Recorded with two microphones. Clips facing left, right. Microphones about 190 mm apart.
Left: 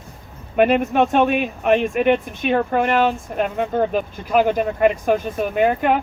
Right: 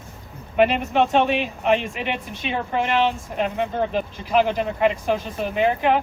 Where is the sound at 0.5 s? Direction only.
50° left (ahead or behind).